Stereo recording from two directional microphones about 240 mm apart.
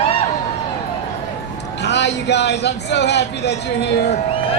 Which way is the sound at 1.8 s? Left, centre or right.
Left.